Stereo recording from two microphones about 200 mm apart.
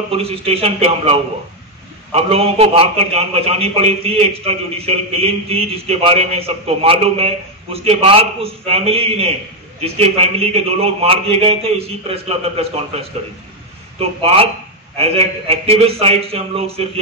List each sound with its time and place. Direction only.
0.1 s a man's voice: 30° right (ahead or behind)